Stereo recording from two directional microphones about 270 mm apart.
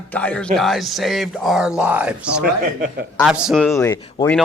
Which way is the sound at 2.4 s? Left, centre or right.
Right.